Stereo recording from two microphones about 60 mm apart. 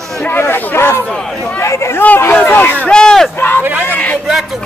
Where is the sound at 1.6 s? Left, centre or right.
Left.